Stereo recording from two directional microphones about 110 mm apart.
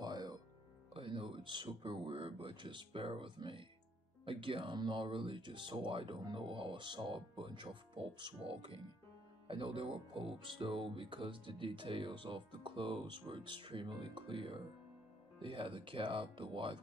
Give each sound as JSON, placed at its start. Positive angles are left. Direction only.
{"t": 0.0, "sound": "music", "side_deg": -40}
{"t": 0.9, "sound": "speech", "side_deg": -50}